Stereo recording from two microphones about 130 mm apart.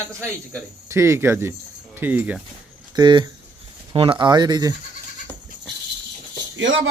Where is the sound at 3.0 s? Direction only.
35° right (ahead or behind).